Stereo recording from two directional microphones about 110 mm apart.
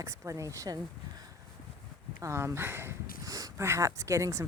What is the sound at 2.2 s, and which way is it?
Speech, 25° right (ahead or behind).